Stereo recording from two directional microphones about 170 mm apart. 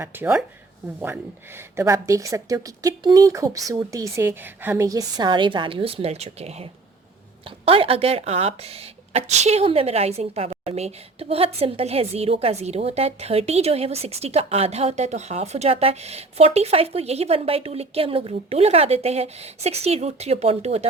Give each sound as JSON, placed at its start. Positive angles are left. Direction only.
{"t": 0.0, "sound": "a woman's voice", "side_deg": -10}